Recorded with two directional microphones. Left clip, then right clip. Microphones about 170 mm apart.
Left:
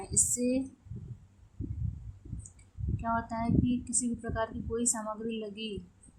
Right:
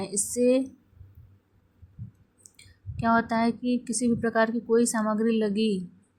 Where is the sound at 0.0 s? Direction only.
25° right (ahead or behind).